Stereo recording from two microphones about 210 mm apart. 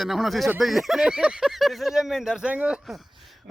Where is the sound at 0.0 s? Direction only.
Centre (ahead or behind).